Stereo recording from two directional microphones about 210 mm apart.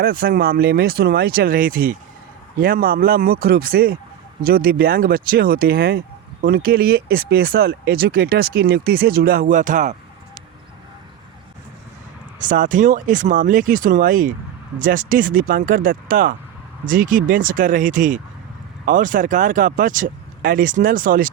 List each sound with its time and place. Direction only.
0.0 s speech: 45° right (ahead or behind)
12.4 s speech: 40° right (ahead or behind)